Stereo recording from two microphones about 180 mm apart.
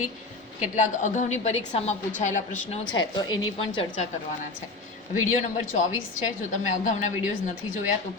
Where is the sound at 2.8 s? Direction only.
25° left (ahead or behind).